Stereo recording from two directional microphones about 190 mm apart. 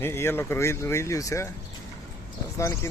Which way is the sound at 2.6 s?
15° left (ahead or behind).